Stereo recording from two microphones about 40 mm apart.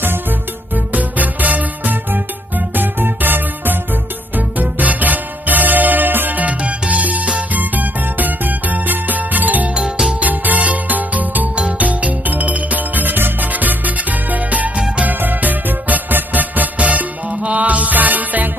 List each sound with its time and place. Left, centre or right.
0.0 s music: right
0.9 s music: right
4.4 s music: right